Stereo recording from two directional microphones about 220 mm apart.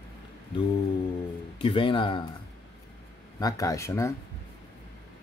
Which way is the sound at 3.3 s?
15° left (ahead or behind).